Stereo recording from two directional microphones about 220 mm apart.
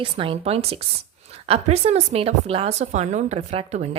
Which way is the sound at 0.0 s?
25° right (ahead or behind).